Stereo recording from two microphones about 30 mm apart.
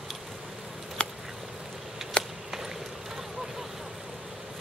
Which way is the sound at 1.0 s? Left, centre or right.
Left.